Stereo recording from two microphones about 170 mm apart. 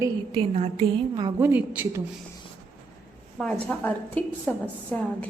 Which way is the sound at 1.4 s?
10° right (ahead or behind).